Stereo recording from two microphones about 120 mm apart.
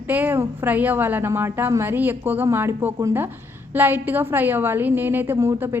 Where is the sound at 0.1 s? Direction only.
15° right (ahead or behind).